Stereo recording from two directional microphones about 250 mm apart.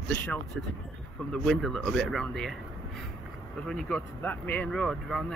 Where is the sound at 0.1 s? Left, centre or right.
Centre.